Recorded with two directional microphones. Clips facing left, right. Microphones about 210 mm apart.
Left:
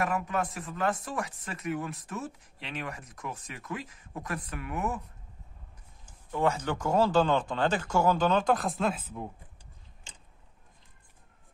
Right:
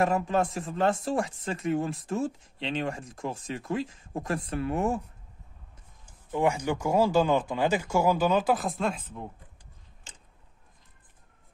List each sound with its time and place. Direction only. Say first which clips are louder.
0.0 s speech: right 5 dB; 30° right (ahead or behind)
6.0 s speech: right 2 dB; 15° right (ahead or behind); by 9.3 s 5° left (ahead or behind)